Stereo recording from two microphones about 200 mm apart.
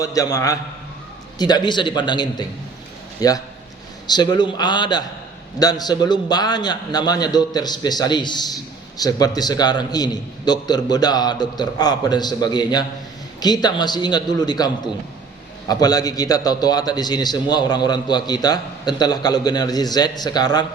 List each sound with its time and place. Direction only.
0.0 s a man's voice: 15° left (ahead or behind)
15.7 s a man's voice: 20° left (ahead or behind)